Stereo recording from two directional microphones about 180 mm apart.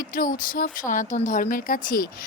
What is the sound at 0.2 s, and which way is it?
Speech, 50° left (ahead or behind).